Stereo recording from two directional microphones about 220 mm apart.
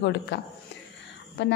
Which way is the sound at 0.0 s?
55° left (ahead or behind).